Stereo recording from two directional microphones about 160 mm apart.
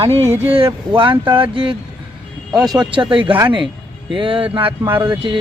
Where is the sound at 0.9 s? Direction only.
30° right (ahead or behind).